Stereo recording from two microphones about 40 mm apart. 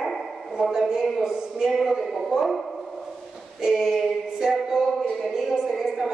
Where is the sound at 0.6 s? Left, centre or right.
Centre.